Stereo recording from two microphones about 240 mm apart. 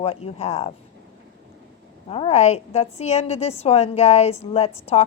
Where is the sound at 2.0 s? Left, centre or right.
Left.